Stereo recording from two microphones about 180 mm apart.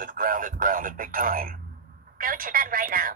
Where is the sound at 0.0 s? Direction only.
50° right (ahead or behind).